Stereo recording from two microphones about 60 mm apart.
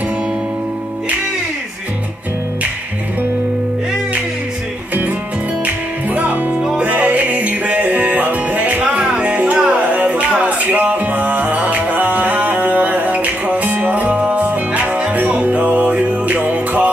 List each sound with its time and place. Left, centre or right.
5.7 s music: right
6.6 s music: centre
6.9 s music: right